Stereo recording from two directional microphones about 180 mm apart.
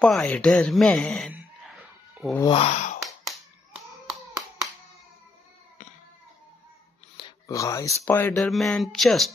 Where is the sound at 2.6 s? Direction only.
40° left (ahead or behind).